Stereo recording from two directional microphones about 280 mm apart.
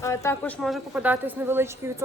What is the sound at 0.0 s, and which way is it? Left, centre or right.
A woman's voice, centre.